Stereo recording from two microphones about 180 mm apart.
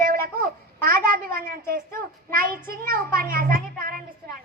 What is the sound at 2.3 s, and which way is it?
Speech, 55° right (ahead or behind).